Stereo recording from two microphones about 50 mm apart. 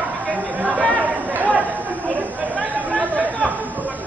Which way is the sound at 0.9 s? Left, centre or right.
Right.